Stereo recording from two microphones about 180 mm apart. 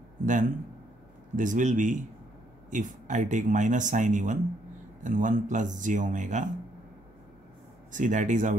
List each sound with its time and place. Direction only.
0.2 s a man's voice: 45° right (ahead or behind)
7.9 s speech: 45° right (ahead or behind)